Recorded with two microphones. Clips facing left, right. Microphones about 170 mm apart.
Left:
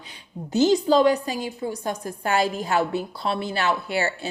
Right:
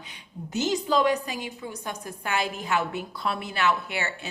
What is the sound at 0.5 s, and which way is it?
A woman's voice, 35° left (ahead or behind).